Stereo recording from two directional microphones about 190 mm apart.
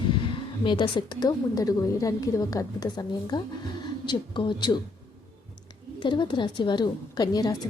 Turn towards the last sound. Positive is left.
turn(degrees=20)  # may be behind; listen again after turning